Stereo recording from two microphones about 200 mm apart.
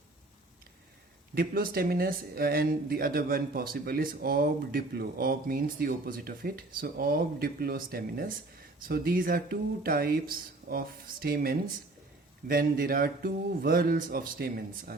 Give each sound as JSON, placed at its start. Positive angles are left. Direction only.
{"t": 1.4, "sound": "speech", "side_deg": -45}